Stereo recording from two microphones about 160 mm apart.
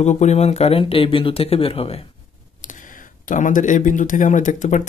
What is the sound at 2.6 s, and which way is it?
Speech, 55° left (ahead or behind).